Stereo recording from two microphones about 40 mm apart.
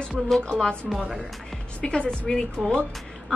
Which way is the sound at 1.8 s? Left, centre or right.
Left.